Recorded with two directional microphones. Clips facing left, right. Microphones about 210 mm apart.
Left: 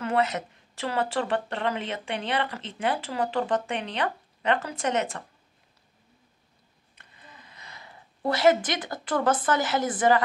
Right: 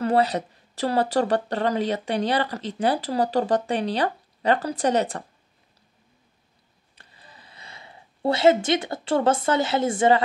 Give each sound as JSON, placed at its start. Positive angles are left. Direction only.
{"t": 0.0, "sound": "speech", "side_deg": -35}
{"t": 7.0, "sound": "speech", "side_deg": -35}